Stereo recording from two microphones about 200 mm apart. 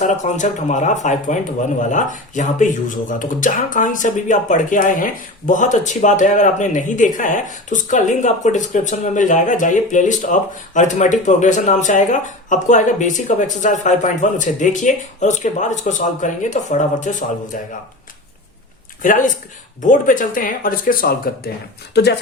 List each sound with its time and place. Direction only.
0.0 s speech: 35° left (ahead or behind)
19.0 s speech: 40° left (ahead or behind)